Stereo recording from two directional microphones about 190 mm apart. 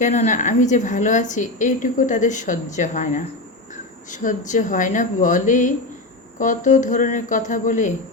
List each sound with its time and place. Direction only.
0.0 s a woman's voice: 40° left (ahead or behind)